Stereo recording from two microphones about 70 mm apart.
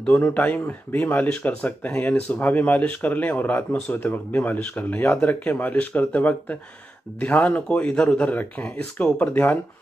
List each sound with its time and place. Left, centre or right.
0.0 s speech: left